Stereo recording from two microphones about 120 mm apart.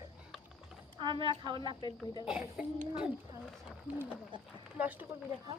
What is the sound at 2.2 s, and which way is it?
A woman's voice, 5° right (ahead or behind).